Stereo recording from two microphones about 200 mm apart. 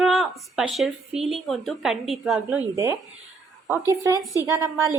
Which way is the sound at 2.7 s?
15° right (ahead or behind).